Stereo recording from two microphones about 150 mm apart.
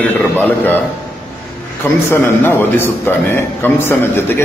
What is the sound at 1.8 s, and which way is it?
A man's voice, 15° left (ahead or behind).